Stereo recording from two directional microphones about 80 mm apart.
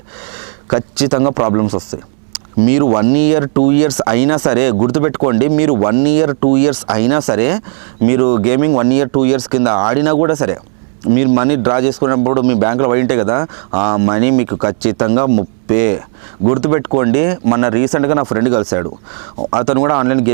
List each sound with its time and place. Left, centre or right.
0.7 s speech: centre